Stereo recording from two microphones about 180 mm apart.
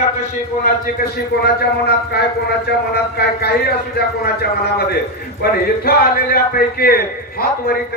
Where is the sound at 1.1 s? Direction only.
60° left (ahead or behind).